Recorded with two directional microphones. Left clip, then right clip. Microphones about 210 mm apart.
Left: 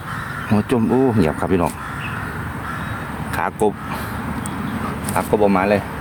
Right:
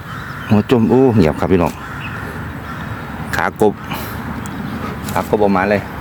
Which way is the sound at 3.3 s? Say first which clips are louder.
Right 5 dB; 25° right (ahead or behind).